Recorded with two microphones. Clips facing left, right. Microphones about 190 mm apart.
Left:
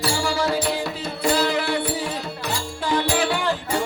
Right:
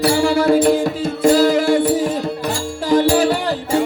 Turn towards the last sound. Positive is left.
turn(degrees=-40)  # may be behind; listen again after turning